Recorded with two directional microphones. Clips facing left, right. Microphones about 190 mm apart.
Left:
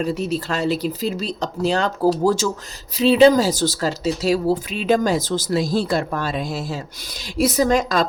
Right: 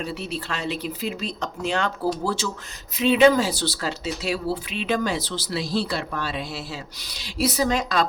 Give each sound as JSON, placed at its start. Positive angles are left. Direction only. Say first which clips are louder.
{"t": 0.0, "sound": "speech", "louder": "left 8 dB", "side_deg": 45}